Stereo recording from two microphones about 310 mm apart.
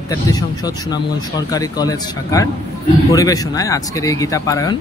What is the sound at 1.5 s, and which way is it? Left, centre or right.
Speech, centre.